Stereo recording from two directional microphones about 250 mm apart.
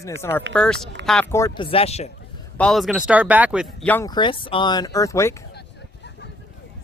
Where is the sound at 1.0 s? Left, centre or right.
Right.